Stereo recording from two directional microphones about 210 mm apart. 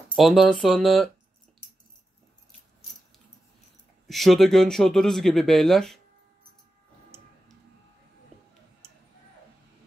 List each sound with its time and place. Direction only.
0.1 s speech: centre (ahead or behind)
4.1 s speech: centre (ahead or behind)